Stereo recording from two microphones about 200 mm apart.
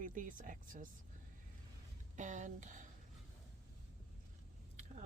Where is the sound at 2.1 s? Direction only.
40° right (ahead or behind).